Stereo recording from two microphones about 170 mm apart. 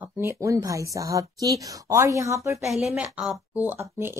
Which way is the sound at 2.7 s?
5° right (ahead or behind).